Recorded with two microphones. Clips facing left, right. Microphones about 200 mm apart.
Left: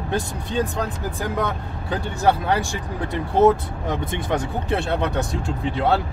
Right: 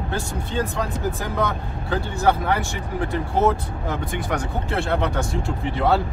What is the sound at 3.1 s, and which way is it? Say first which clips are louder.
Speech: left 5 dB; 20° left (ahead or behind).